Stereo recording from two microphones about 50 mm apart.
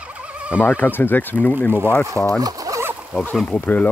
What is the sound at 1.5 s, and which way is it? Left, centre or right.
Speech, right.